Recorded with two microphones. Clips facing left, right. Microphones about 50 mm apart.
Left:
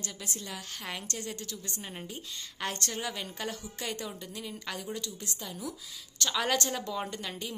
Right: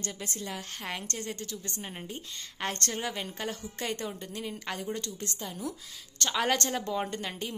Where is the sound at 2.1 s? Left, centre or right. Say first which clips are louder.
Right 1 dB; right.